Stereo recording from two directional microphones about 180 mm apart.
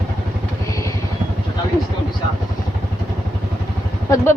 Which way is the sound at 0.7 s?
15° left (ahead or behind).